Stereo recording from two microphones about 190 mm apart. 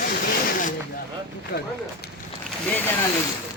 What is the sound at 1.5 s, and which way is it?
Run, 55° left (ahead or behind).